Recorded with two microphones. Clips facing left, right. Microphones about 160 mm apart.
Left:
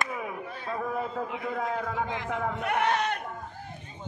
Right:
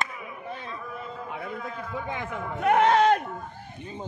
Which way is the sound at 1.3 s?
90° left.